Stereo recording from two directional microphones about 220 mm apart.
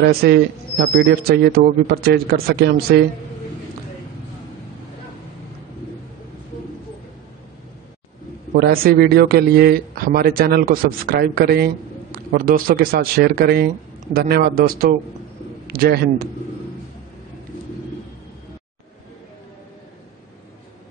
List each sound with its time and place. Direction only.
0.1 s speech: 45° right (ahead or behind)
8.5 s a man's voice: 45° right (ahead or behind)